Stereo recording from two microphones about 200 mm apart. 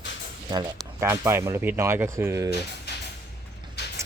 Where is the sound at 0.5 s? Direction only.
15° right (ahead or behind).